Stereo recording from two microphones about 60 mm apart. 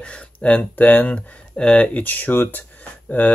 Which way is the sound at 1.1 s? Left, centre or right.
Centre.